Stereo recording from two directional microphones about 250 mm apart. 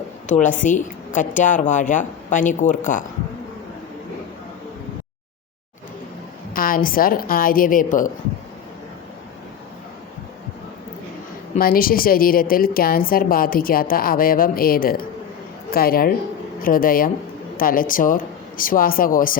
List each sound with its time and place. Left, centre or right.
0.3 s a woman's voice: left
6.5 s a woman's voice: left
11.5 s a woman's voice: left